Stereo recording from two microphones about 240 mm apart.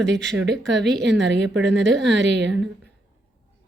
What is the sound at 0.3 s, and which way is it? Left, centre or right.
A woman's voice, right.